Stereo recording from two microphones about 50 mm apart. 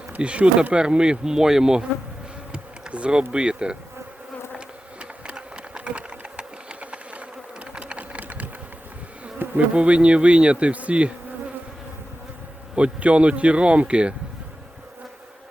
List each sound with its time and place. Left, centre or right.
0.2 s insect: right
4.5 s sewing machine: right
9.4 s bee: right
9.7 s speech: right
12.7 s speech: right